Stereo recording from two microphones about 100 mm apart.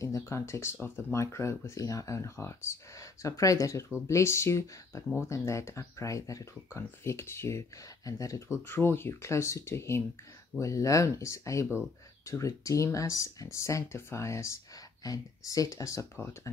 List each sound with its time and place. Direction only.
0.0 s speech: 30° left (ahead or behind)